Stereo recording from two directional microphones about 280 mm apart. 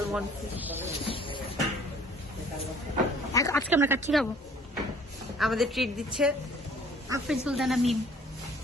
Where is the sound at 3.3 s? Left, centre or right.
Centre.